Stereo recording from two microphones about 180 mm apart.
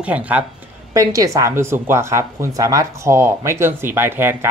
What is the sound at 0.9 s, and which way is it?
Speech, 20° right (ahead or behind).